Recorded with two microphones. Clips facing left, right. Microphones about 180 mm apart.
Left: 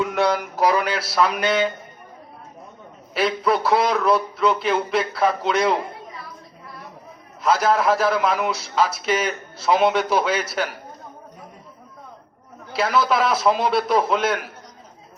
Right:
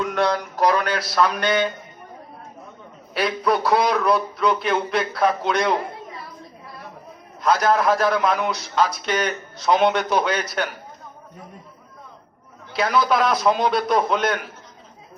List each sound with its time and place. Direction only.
0.0 s a sound: 5° left (ahead or behind)
3.2 s a man's voice: centre (ahead or behind)
7.4 s a man's voice: 5° left (ahead or behind)
12.7 s a man's voice: centre (ahead or behind)